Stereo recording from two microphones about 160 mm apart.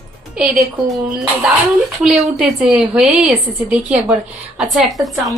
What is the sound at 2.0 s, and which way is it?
A woman's voice, centre (ahead or behind).